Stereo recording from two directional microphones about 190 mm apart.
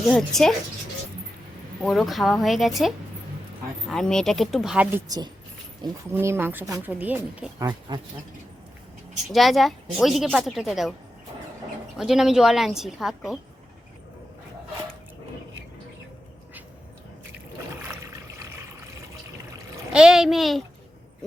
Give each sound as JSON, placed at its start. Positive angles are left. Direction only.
{"t": 0.1, "sound": "a woman's voice", "side_deg": 0}
{"t": 1.8, "sound": "a woman's voice", "side_deg": 0}
{"t": 6.1, "sound": "speech", "side_deg": -10}
{"t": 7.6, "sound": "speech", "side_deg": -20}
{"t": 9.3, "sound": "a woman's voice", "side_deg": 0}
{"t": 11.9, "sound": "a woman's voice", "side_deg": 0}
{"t": 19.9, "sound": "a woman's voice", "side_deg": -5}